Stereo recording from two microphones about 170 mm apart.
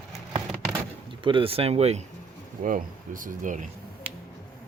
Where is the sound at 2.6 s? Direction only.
50° right (ahead or behind).